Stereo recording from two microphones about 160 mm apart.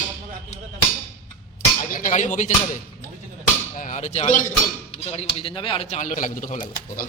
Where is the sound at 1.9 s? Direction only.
55° left (ahead or behind).